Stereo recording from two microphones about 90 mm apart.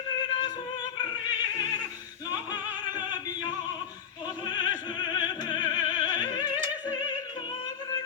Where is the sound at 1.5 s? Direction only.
50° left (ahead or behind).